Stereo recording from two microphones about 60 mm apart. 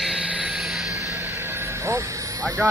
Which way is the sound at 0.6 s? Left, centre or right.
Centre.